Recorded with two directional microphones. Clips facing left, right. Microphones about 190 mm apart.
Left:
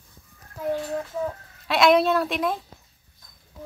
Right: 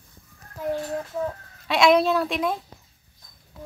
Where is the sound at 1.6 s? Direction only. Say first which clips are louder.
Even; centre (ahead or behind).